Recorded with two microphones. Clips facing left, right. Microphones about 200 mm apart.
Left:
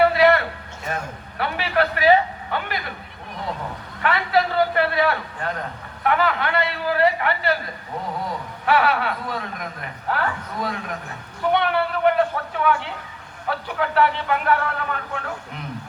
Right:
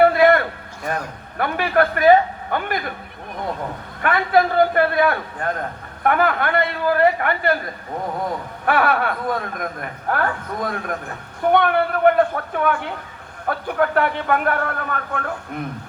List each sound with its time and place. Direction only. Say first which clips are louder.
0.0 s a sound: right 3 dB; 50° right (ahead or behind)
1.4 s a man's voice: right 4 dB; 50° right (ahead or behind)
4.0 s a man's voice: right 3 dB; 50° right (ahead or behind)
8.6 s a man's voice: right 1 dB; 50° right (ahead or behind)